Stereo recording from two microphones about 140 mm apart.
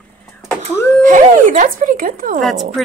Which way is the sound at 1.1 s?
65° right (ahead or behind).